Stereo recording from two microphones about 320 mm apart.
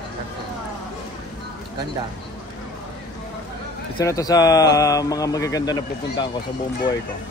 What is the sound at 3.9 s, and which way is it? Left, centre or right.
Speech, centre.